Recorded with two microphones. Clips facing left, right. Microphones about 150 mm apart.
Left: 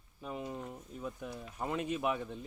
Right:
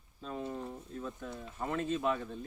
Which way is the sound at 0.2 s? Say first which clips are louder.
Right 1 dB; 15° left (ahead or behind).